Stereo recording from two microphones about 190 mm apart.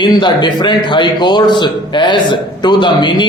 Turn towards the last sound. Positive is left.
turn(degrees=25)  # may be behind; listen again after turning